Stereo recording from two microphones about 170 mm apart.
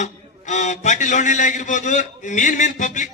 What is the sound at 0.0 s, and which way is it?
A man's voice, 45° left (ahead or behind).